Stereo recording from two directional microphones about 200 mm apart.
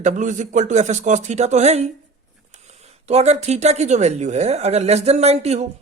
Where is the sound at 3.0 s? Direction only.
35° right (ahead or behind).